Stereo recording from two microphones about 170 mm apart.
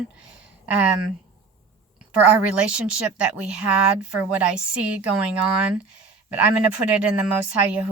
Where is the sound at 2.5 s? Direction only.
5° right (ahead or behind).